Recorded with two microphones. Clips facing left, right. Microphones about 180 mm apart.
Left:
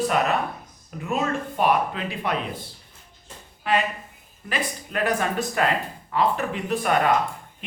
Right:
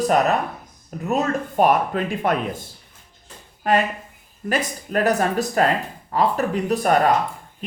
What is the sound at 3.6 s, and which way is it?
Speech, 45° right (ahead or behind).